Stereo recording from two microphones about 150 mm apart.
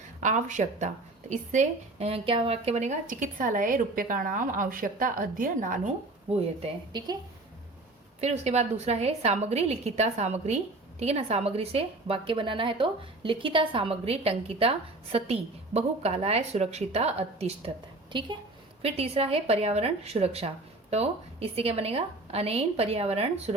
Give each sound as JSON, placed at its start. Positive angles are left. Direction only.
{"t": 0.2, "sound": "a woman's voice", "side_deg": -55}
{"t": 6.6, "sound": "a woman's voice", "side_deg": -30}
{"t": 8.2, "sound": "a woman's voice", "side_deg": -45}
{"t": 18.1, "sound": "a woman's voice", "side_deg": -30}
{"t": 18.8, "sound": "a woman's voice", "side_deg": -40}